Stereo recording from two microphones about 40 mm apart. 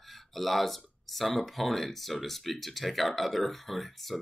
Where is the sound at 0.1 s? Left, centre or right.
Centre.